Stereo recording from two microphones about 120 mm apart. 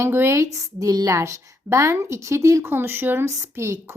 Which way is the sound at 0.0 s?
20° right (ahead or behind).